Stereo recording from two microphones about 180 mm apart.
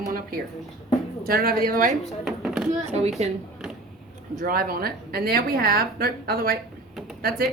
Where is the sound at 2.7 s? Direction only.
35° right (ahead or behind).